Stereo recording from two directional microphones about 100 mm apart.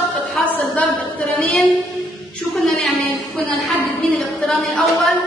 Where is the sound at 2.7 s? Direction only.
15° left (ahead or behind).